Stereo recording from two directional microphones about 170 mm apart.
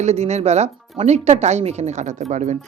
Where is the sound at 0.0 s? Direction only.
40° right (ahead or behind).